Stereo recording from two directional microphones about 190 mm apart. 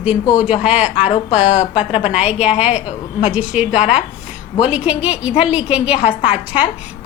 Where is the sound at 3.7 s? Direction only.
40° left (ahead or behind).